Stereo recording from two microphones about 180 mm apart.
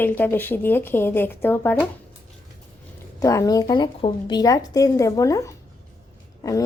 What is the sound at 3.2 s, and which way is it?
Speech, 15° left (ahead or behind).